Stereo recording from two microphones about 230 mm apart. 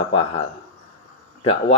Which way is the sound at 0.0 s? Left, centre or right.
Left.